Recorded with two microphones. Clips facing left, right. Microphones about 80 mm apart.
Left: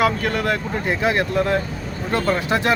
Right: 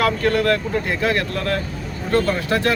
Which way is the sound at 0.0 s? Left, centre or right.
Centre.